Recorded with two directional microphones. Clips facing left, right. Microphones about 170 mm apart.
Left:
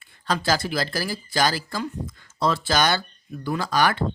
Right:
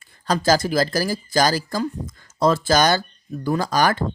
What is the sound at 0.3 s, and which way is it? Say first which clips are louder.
Speech: right 5 dB; 40° right (ahead or behind).